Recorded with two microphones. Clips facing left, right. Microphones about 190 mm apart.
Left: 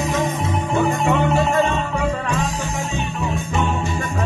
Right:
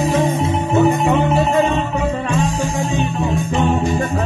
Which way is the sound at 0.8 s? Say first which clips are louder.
Right 4 dB; 20° right (ahead or behind).